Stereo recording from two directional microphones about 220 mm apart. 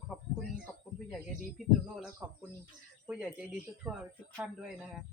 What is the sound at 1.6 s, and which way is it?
Speech, centre (ahead or behind).